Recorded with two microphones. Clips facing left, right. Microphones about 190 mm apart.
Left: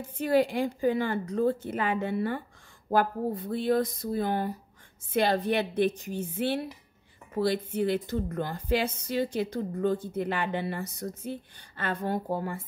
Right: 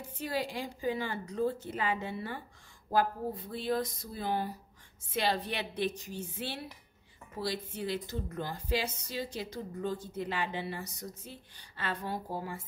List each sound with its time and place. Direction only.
0.2 s a woman's voice: 55° left (ahead or behind)